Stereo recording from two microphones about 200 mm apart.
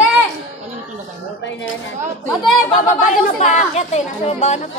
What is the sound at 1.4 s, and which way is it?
Speech, 65° left (ahead or behind).